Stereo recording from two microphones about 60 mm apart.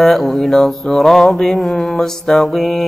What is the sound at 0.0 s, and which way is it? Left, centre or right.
Mantra, centre.